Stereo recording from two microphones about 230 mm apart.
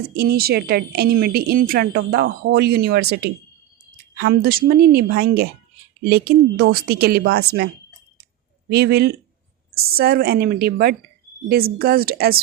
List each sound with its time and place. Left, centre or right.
0.0 s speech: right
8.7 s a woman's voice: right